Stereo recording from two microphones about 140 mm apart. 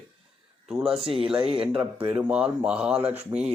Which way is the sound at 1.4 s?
40° right (ahead or behind).